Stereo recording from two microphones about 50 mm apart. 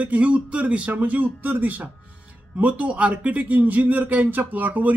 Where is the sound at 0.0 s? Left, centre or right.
Right.